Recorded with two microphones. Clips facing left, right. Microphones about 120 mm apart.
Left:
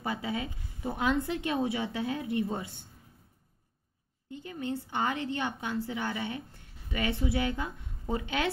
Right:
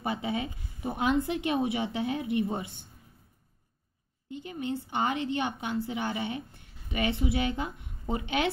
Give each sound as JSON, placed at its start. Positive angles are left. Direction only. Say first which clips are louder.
{"t": 0.0, "sound": "a woman's voice", "louder": "right 2 dB", "side_deg": -20}
{"t": 4.3, "sound": "a woman's voice", "louder": "right 2 dB", "side_deg": -20}